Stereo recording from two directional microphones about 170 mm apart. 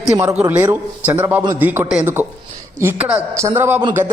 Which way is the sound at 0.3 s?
10° right (ahead or behind).